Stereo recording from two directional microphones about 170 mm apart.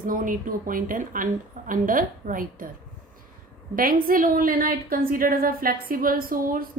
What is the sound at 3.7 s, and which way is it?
A woman's voice, 55° right (ahead or behind).